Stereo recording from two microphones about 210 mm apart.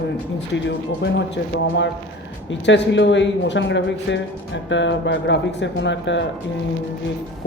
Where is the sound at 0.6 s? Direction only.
55° left (ahead or behind).